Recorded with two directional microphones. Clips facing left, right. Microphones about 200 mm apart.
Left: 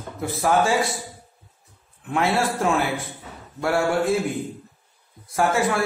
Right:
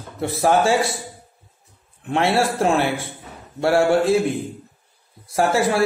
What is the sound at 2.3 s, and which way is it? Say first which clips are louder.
Speech: right 4 dB; 30° right (ahead or behind).